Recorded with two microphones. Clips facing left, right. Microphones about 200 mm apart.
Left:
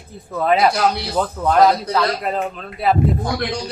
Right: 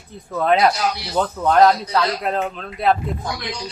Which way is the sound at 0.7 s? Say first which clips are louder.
Left 5 dB; 60° left (ahead or behind).